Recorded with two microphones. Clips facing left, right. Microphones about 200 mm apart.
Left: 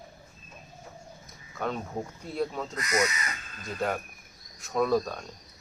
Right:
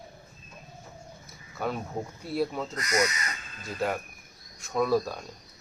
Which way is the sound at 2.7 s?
40° right (ahead or behind).